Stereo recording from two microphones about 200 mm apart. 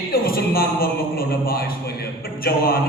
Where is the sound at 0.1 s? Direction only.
50° left (ahead or behind).